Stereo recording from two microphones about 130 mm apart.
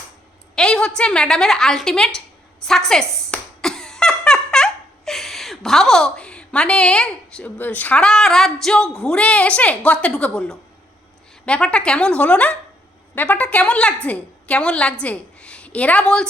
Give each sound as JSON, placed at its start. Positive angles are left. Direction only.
{"t": 0.5, "sound": "a woman's voice", "side_deg": 5}
{"t": 2.6, "sound": "a sound", "side_deg": 5}
{"t": 8.6, "sound": "a woman's voice", "side_deg": 5}